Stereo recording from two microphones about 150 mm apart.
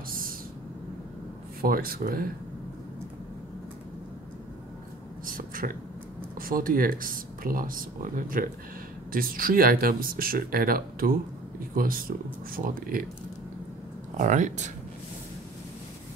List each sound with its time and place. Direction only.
1.6 s speech: 75° right (ahead or behind)
5.2 s a sound: 70° right (ahead or behind)
6.3 s speech: 70° right (ahead or behind)
14.1 s speech: 55° right (ahead or behind)